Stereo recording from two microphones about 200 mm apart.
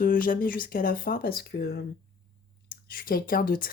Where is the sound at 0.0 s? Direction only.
45° left (ahead or behind).